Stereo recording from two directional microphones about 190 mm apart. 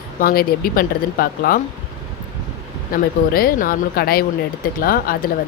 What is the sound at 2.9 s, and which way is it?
Speech, 50° left (ahead or behind).